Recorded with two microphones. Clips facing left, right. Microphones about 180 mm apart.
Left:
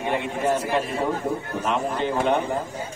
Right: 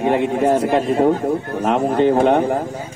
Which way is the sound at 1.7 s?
50° right (ahead or behind).